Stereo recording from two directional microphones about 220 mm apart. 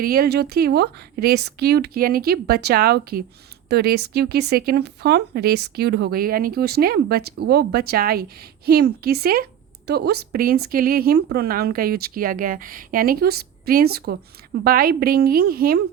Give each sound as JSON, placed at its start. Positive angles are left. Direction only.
{"t": 0.0, "sound": "speech", "side_deg": -40}